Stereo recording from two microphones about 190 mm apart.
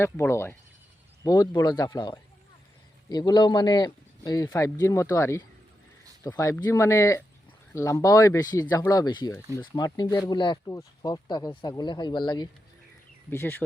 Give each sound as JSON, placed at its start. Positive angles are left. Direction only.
{"t": 0.0, "sound": "speech", "side_deg": 15}
{"t": 13.3, "sound": "speech", "side_deg": 10}